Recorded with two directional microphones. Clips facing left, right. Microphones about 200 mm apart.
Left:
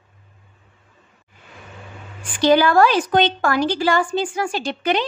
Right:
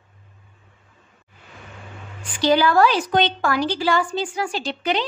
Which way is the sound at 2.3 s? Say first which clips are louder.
Left 2 dB; 50° left (ahead or behind).